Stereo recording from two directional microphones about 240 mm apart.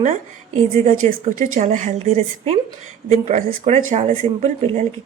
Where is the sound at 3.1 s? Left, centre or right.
Right.